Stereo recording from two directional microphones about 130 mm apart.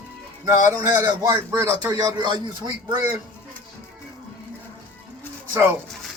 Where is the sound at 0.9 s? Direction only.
30° right (ahead or behind).